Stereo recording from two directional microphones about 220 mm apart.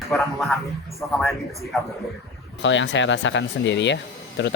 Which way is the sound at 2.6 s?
55° left (ahead or behind).